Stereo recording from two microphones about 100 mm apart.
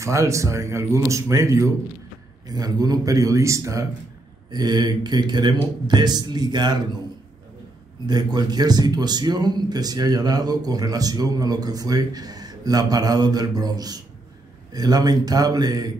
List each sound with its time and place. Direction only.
0.0 s speech: 30° right (ahead or behind)
2.4 s speech: 40° right (ahead or behind)
4.5 s speech: 45° right (ahead or behind)
8.1 s speech: 45° right (ahead or behind)